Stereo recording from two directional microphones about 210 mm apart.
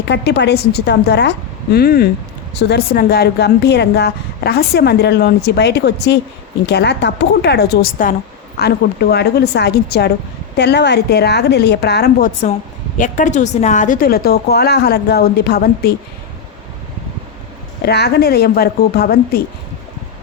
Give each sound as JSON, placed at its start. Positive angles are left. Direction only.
{"t": 0.1, "sound": "a woman's voice", "side_deg": 55}
{"t": 13.0, "sound": "a woman's voice", "side_deg": 35}
{"t": 17.8, "sound": "a woman's voice", "side_deg": 50}